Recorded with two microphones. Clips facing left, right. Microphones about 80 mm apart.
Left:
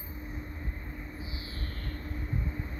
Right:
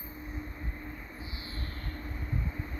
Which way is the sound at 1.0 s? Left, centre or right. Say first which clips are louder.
Left 2 dB; centre.